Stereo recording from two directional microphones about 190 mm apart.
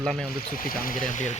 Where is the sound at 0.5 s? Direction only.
50° left (ahead or behind).